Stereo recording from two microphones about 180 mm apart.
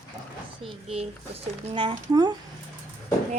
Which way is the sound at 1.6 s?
30° right (ahead or behind).